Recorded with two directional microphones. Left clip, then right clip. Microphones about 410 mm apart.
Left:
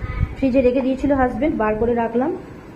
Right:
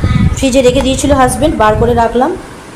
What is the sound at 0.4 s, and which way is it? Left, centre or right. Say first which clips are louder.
A woman's voice: right 8 dB; left.